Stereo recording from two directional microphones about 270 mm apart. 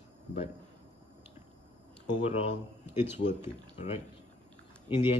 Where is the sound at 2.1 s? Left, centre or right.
Left.